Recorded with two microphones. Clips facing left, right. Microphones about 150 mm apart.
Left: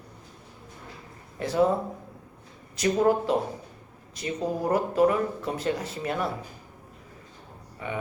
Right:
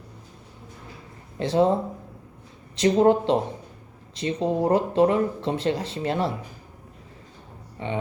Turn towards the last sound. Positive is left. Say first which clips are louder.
# right 4 dB
turn(degrees=-25)  # may be behind; listen again after turning